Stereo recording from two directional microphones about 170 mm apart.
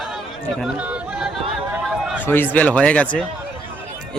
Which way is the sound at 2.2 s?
10° left (ahead or behind).